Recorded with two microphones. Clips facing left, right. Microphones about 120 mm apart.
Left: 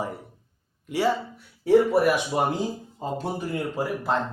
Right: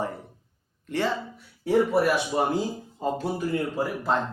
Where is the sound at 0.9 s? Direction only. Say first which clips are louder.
Left 3 dB; 10° left (ahead or behind).